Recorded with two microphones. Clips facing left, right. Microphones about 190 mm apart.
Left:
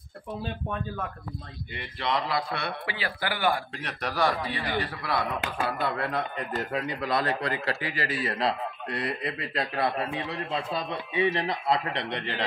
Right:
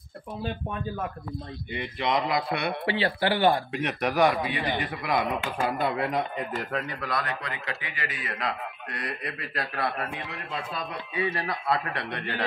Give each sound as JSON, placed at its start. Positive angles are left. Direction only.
{"t": 1.7, "sound": "speech", "side_deg": -20}
{"t": 3.0, "sound": "speech", "side_deg": -30}
{"t": 6.7, "sound": "a man's voice", "side_deg": 10}
{"t": 7.0, "sound": "a man's voice", "side_deg": 25}